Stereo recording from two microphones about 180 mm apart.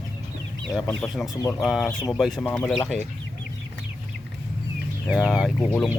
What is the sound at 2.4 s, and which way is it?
Speech, 10° left (ahead or behind).